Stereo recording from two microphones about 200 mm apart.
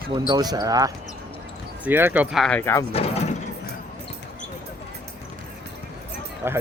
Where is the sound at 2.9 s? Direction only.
30° left (ahead or behind).